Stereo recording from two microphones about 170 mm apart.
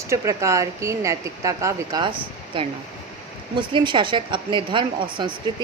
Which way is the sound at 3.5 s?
30° right (ahead or behind).